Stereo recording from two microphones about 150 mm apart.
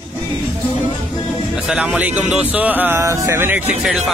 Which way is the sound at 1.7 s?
5° right (ahead or behind).